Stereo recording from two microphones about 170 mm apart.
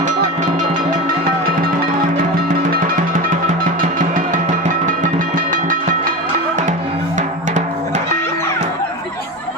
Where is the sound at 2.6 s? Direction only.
55° right (ahead or behind).